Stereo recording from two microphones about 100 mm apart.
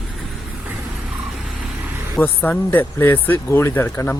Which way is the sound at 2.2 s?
20° left (ahead or behind).